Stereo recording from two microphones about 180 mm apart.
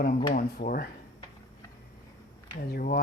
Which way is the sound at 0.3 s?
50° left (ahead or behind).